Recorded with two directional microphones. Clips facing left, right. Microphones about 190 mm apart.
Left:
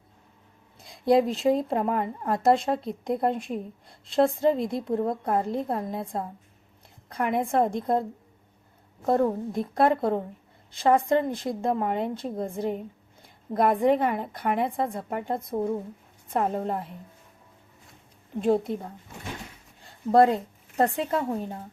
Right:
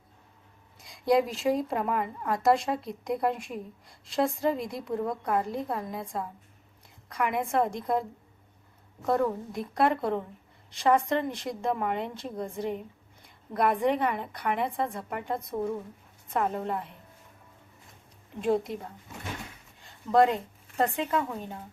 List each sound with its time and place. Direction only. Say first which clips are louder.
0.9 s a woman's voice: left 3 dB; 25° left (ahead or behind)
19.8 s a woman's voice: left 3 dB; 35° left (ahead or behind)